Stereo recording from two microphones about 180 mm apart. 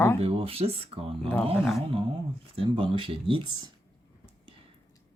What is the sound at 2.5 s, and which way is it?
Speech, 30° right (ahead or behind).